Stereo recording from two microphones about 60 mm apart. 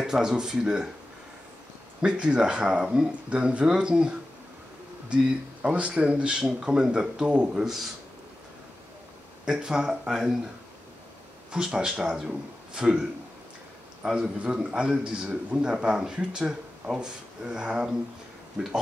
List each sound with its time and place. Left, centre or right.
0.0 s speech: centre
2.0 s speech: centre
5.1 s speech: centre
9.4 s speech: centre
11.5 s speech: centre
14.0 s speech: centre